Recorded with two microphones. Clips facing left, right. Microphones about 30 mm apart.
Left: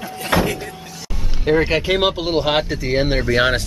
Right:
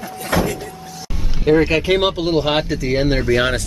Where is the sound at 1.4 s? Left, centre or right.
Centre.